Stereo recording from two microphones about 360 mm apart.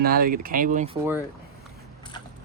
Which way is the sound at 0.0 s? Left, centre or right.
Right.